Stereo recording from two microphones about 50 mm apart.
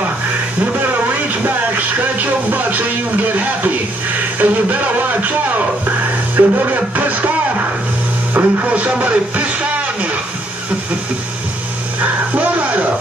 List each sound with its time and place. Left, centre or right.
1.4 s speech: right
4.4 s music: right
6.3 s speech: right
8.3 s speech: right
8.7 s speech: right
12.0 s music: right